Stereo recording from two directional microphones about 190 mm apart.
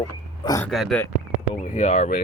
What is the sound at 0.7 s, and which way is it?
Speech, centre (ahead or behind).